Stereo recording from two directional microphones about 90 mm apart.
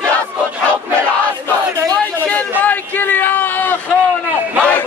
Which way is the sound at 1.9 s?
15° left (ahead or behind).